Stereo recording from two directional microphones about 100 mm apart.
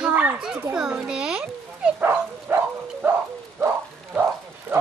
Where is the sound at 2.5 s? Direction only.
20° right (ahead or behind).